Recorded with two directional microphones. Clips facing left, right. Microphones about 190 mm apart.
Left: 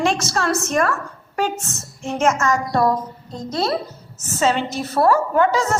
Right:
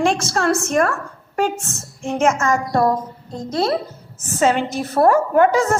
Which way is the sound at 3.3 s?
50° right (ahead or behind).